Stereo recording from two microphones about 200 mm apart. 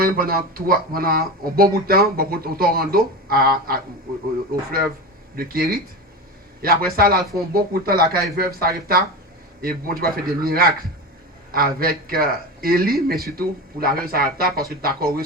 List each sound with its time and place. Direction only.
0.0 s speech: 45° right (ahead or behind)
5.4 s speech: 50° right (ahead or behind)